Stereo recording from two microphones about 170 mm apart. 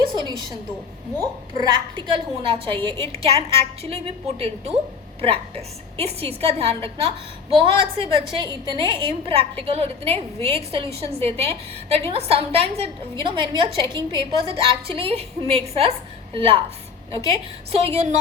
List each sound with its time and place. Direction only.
0.2 s a woman's voice: 25° right (ahead or behind)
17.7 s a woman's voice: 40° right (ahead or behind)